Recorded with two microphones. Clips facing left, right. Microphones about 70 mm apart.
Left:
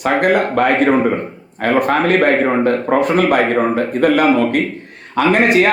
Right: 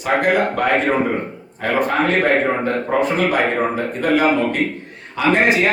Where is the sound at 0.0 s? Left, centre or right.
Left.